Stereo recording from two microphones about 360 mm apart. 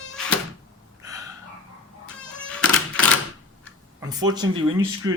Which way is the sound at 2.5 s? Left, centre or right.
Centre.